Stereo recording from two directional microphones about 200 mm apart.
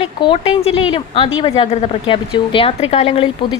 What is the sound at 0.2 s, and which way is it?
A woman's voice, 25° left (ahead or behind).